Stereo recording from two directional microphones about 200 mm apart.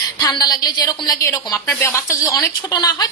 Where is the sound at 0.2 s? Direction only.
20° left (ahead or behind).